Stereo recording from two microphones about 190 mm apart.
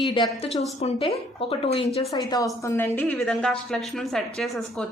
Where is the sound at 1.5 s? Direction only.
30° left (ahead or behind).